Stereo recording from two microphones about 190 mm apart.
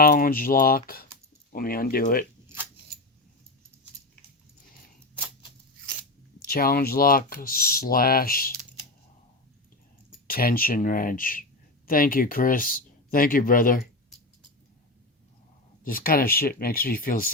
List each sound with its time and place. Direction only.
0.0 s speech: 50° left (ahead or behind)
6.4 s speech: 50° left (ahead or behind)
10.2 s speech: 50° left (ahead or behind)
15.8 s speech: 50° left (ahead or behind)